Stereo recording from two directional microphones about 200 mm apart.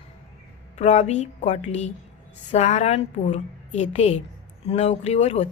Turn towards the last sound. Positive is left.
turn(degrees=35)  # may be behind; listen again after turning